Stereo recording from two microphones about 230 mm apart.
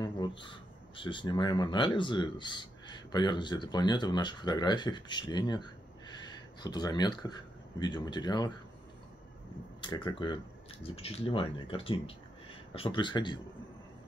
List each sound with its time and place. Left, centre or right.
0.0 s speech: centre
9.8 s speech: centre